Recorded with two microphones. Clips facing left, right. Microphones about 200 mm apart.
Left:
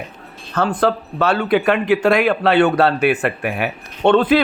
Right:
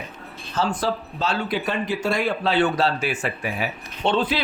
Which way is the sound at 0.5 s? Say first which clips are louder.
Left 6 dB; 60° left (ahead or behind).